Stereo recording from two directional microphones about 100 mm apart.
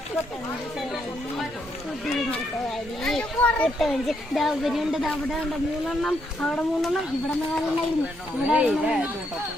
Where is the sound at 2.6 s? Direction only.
5° left (ahead or behind).